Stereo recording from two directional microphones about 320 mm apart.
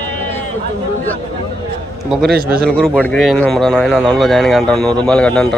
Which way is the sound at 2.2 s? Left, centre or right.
Right.